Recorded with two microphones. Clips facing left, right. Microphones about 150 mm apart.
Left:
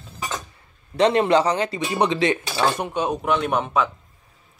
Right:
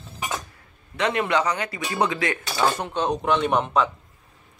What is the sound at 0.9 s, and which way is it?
Speech, 30° left (ahead or behind).